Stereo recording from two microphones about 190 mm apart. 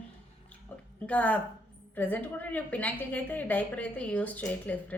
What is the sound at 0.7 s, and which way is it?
A woman's voice, 10° left (ahead or behind).